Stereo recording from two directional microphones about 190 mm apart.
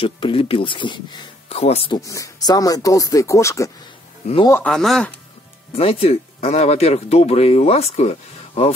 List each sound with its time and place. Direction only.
0.0 s speech: 30° left (ahead or behind)
2.0 s speech: 15° left (ahead or behind)
5.8 s speech: 30° left (ahead or behind)